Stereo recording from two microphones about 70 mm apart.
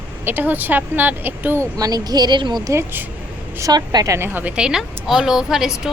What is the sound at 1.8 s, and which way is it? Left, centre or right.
Speech, right.